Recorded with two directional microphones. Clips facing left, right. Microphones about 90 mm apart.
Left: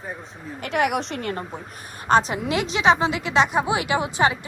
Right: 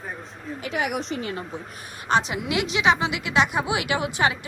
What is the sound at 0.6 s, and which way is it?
Speech, 70° left (ahead or behind).